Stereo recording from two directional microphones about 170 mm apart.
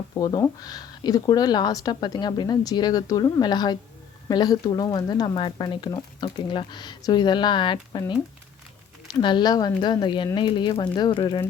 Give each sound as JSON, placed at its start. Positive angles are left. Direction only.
{"t": 0.1, "sound": "speech", "side_deg": 20}
{"t": 9.1, "sound": "speech", "side_deg": 25}